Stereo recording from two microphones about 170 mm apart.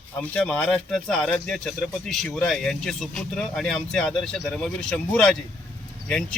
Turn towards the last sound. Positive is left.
turn(degrees=5)  # may be behind; listen again after turning